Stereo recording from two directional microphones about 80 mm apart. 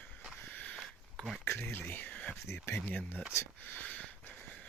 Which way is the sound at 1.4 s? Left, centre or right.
Left.